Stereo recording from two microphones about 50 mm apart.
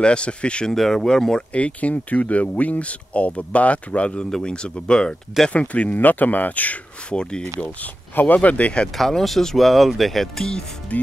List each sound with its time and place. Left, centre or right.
0.0 s speech: left
0.7 s speech: centre
1.5 s speech: left
7.1 s speech: centre
7.8 s speech: left
8.9 s speech: centre
10.9 s speech: left